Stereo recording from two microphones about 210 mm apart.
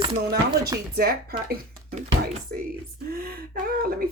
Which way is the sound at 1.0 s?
45° right (ahead or behind).